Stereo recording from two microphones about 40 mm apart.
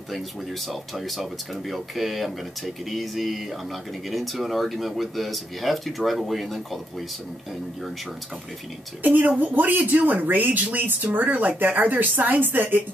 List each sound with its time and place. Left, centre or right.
0.1 s speech: centre
9.0 s speech: right